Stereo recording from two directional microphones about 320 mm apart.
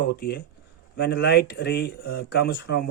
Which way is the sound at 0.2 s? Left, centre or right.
Left.